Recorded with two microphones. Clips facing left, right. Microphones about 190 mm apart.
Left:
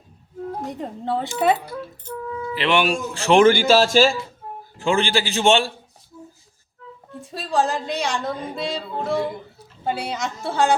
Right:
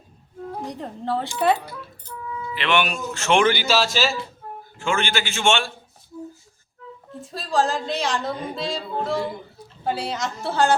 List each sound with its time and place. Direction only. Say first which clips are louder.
0.7 s speech: even; centre (ahead or behind)
2.0 s music: left 3 dB; 50° left (ahead or behind)
2.6 s speech: left 3 dB; 35° left (ahead or behind); by 4.1 s 50° left (ahead or behind)
4.8 s speech: left 4 dB; 35° left (ahead or behind)
7.2 s speech: even; centre (ahead or behind)